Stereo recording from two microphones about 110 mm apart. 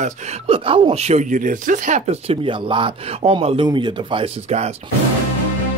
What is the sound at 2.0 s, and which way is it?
Speech, 80° right.